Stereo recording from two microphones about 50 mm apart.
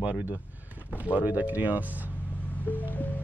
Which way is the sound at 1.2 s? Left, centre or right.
Right.